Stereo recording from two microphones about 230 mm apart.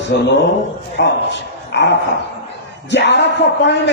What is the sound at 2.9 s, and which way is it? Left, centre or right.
Speech, left.